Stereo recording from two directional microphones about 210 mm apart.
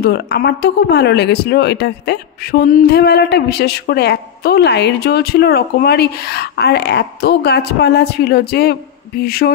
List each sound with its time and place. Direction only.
0.0 s speech: 50° left (ahead or behind)